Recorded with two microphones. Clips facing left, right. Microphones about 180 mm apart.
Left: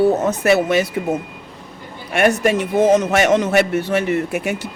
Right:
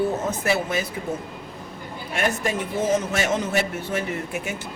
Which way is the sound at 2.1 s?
75° left (ahead or behind).